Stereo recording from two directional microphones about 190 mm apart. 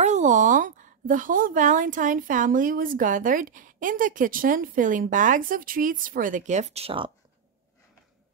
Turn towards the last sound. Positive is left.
turn(degrees=-30)  # may be behind; listen again after turning